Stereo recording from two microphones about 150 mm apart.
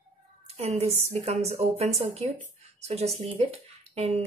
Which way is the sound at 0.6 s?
45° right (ahead or behind).